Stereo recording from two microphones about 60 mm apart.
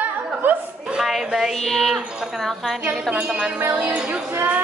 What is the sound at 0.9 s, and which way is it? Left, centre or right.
Speech, centre.